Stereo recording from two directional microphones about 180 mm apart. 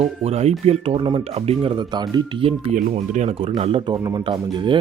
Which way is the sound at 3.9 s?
25° right (ahead or behind).